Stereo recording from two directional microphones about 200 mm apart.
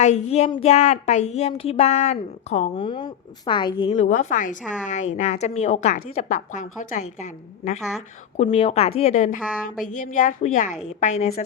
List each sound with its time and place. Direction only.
0.0 s a woman's voice: 35° left (ahead or behind)
3.9 s a woman's voice: 35° left (ahead or behind)